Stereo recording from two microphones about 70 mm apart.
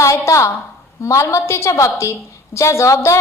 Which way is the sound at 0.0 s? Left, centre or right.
Left.